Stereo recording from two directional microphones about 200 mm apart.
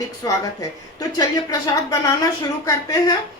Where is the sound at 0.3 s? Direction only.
20° left (ahead or behind).